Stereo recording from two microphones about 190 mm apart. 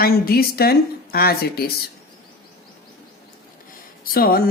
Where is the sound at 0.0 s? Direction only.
55° left (ahead or behind).